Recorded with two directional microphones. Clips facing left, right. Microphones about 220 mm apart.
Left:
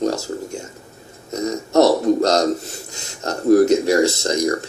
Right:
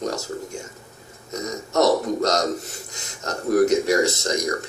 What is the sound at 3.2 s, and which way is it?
Speech, 30° left (ahead or behind).